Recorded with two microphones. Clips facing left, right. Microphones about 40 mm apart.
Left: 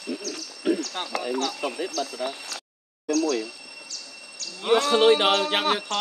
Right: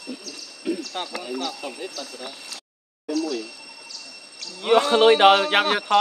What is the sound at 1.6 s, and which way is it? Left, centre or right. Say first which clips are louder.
Speech: left 4 dB; left.